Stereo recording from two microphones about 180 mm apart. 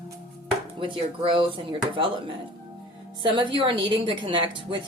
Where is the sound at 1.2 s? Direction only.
30° right (ahead or behind).